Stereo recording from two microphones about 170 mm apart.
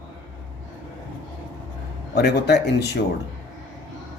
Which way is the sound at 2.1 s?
75° left (ahead or behind).